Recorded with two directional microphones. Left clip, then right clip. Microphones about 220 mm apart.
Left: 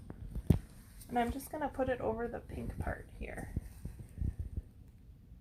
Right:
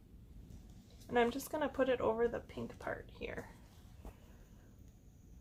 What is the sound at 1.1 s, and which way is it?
A woman's voice, 20° right (ahead or behind).